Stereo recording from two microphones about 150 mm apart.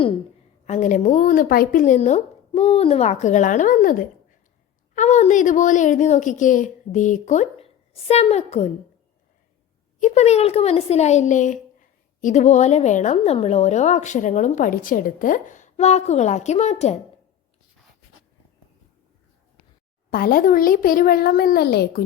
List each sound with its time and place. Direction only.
0.6 s a woman's voice: 55° left (ahead or behind)
4.9 s a woman's voice: 50° left (ahead or behind)
10.0 s a woman's voice: 45° left (ahead or behind)
20.1 s a child's voice: 75° left (ahead or behind)